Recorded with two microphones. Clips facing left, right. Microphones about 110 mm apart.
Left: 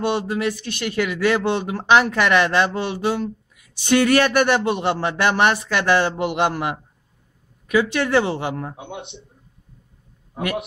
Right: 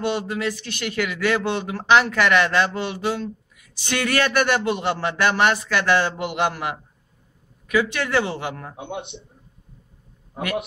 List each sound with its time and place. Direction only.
0.1 s speech: 20° left (ahead or behind)